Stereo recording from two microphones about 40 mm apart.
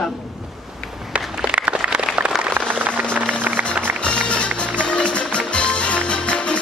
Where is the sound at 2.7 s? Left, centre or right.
Right.